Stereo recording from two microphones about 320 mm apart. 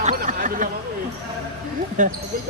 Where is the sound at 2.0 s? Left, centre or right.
Right.